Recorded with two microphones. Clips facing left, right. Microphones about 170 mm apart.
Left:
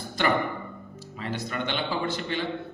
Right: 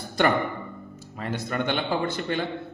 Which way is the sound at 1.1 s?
50° right (ahead or behind).